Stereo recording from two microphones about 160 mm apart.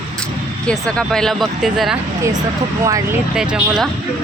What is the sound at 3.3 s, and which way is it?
Speech, 5° right (ahead or behind).